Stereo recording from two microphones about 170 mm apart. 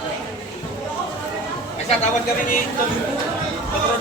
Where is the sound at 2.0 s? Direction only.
55° left (ahead or behind).